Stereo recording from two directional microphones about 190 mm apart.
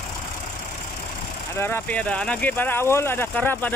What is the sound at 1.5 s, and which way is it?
Speech, 10° left (ahead or behind).